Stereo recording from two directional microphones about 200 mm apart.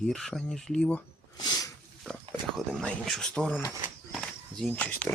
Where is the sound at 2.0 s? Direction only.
5° left (ahead or behind).